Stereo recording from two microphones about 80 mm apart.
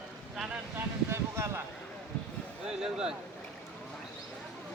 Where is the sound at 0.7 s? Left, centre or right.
Right.